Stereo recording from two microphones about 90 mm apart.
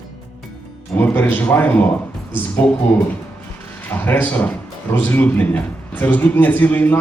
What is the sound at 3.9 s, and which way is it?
A man's voice, 20° left (ahead or behind).